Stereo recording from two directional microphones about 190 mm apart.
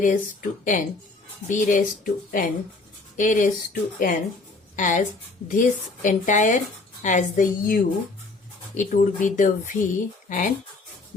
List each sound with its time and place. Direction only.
0.0 s a woman's voice: 45° left (ahead or behind)